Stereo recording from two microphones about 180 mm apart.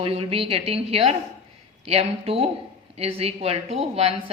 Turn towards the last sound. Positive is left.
turn(degrees=-35)  # may be behind; listen again after turning